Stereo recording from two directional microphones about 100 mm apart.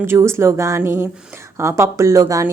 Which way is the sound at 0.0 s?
25° right (ahead or behind).